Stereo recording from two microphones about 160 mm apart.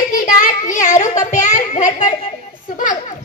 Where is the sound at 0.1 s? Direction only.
55° left (ahead or behind).